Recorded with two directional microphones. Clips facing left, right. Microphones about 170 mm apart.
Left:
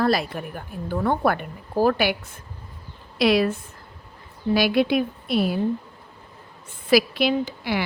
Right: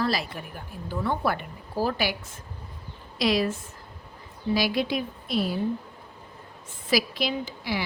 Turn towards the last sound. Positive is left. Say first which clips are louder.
# left 6 dB
turn(degrees=60)  # may be behind; listen again after turning